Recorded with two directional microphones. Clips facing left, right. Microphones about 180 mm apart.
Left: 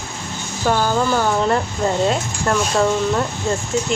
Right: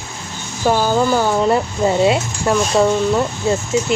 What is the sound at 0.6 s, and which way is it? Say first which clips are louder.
Speech: right 3 dB; 10° right (ahead or behind).